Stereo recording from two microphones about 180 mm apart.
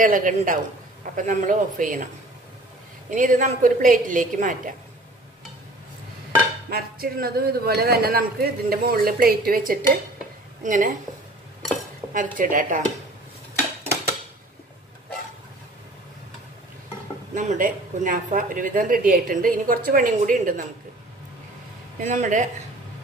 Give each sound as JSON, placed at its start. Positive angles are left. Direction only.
{"t": 0.0, "sound": "speech", "side_deg": -45}
{"t": 3.1, "sound": "speech", "side_deg": -45}
{"t": 6.7, "sound": "speech", "side_deg": -55}
{"t": 12.1, "sound": "speech", "side_deg": -50}
{"t": 17.3, "sound": "speech", "side_deg": -40}
{"t": 22.0, "sound": "speech", "side_deg": -45}